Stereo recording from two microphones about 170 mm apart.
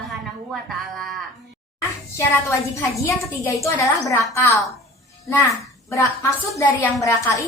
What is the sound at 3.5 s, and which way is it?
A woman's voice, 20° left (ahead or behind).